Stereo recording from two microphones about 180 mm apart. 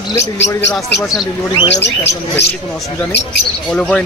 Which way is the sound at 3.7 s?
5° left (ahead or behind).